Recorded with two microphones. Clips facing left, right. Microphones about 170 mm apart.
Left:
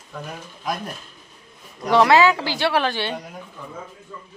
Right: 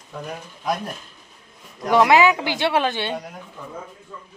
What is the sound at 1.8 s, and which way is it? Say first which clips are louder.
Speech: even; 15° right (ahead or behind).